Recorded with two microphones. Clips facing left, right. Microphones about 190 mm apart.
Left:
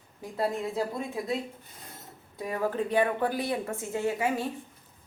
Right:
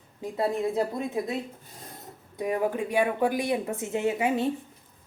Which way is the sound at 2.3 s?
20° right (ahead or behind).